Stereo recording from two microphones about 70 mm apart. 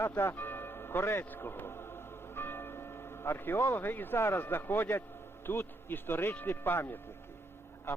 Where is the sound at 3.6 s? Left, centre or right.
Left.